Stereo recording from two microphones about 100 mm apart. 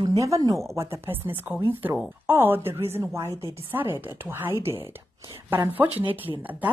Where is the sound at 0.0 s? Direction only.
35° right (ahead or behind).